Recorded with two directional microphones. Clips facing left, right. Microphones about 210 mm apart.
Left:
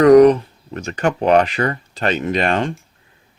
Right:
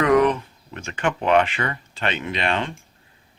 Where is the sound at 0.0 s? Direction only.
40° left (ahead or behind).